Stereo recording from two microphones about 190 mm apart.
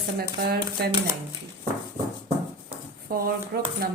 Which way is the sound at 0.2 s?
55° right (ahead or behind).